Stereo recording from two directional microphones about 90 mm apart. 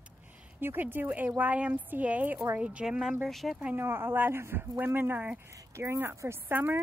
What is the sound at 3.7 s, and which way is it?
A woman's voice, 25° right (ahead or behind).